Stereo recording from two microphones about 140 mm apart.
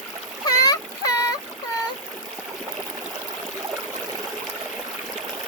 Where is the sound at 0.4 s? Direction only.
25° left (ahead or behind).